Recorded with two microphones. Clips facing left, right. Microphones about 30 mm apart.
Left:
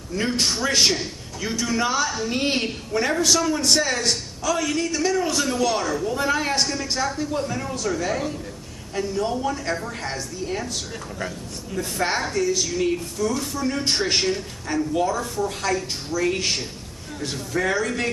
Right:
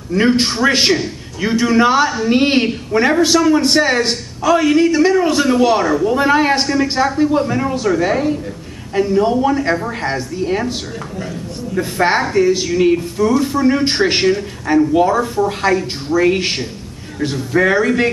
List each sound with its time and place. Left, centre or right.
0.1 s a man's voice: right
11.7 s a man's voice: right